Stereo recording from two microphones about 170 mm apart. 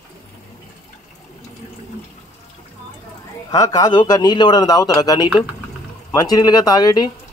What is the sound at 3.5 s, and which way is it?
Speech, 20° left (ahead or behind).